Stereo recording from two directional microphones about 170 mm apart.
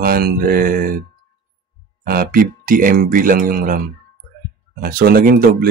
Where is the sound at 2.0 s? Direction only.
60° right (ahead or behind).